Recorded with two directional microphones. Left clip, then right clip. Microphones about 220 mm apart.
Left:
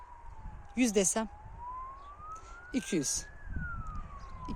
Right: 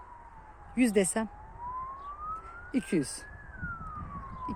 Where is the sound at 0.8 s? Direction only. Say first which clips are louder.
Right 2 dB; 20° left (ahead or behind).